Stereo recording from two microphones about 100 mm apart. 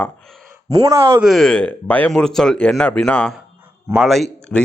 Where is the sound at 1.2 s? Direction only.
Centre (ahead or behind).